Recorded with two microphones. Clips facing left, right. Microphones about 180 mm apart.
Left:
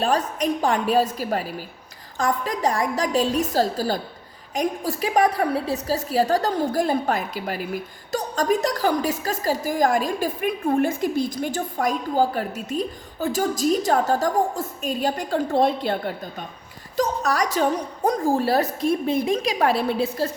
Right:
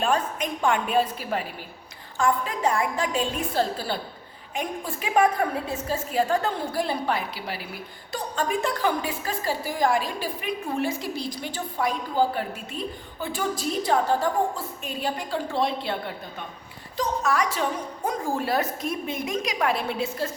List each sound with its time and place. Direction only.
0.0 s a woman's voice: 35° left (ahead or behind)